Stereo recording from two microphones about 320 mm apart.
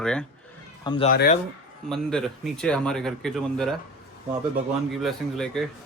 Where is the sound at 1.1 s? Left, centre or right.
Left.